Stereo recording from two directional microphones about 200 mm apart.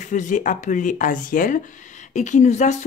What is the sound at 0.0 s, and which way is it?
Speech, 40° left (ahead or behind).